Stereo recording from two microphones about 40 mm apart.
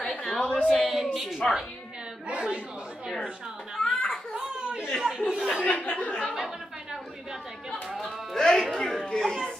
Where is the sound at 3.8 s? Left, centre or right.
Left.